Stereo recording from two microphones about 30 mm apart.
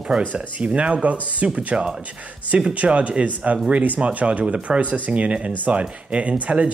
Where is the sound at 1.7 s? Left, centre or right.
Right.